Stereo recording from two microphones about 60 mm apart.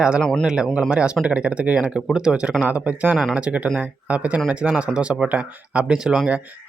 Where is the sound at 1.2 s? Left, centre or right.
Centre.